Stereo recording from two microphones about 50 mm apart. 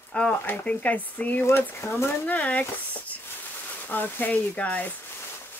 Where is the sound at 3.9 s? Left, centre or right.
Left.